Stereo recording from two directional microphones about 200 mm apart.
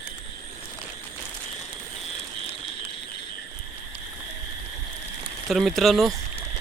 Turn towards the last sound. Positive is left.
turn(degrees=0)  # may be behind; listen again after turning